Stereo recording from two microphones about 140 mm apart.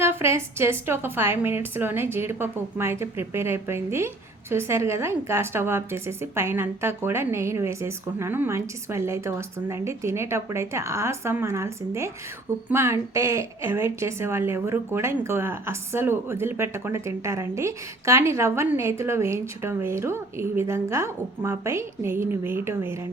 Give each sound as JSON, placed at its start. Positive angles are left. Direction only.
{"t": 0.0, "sound": "a woman's voice", "side_deg": -15}